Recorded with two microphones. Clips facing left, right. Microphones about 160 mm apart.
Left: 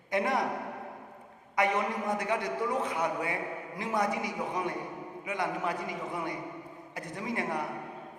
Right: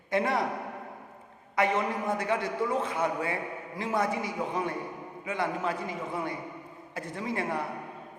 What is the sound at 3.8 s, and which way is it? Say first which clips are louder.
A man's voice: right 2 dB; 20° left (ahead or behind).